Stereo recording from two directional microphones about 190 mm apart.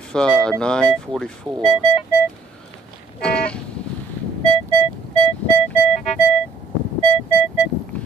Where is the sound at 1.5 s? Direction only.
20° right (ahead or behind).